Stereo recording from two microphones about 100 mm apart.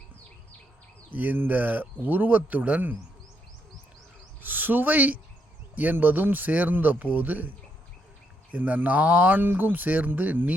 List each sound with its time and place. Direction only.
1.1 s speech: 20° right (ahead or behind)
4.4 s speech: 20° right (ahead or behind)
8.5 s speech: 15° right (ahead or behind)